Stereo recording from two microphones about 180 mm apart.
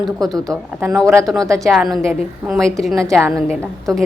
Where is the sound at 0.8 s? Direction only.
15° right (ahead or behind).